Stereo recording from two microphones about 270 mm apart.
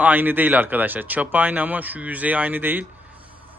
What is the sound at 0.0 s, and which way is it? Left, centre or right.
Speech, centre.